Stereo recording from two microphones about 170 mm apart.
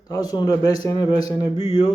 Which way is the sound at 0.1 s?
25° left (ahead or behind).